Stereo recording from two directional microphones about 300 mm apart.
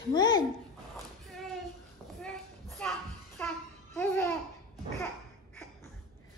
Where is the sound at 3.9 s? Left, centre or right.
Centre.